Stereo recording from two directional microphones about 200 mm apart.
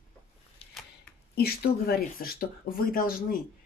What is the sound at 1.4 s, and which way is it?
Speech, 50° left (ahead or behind).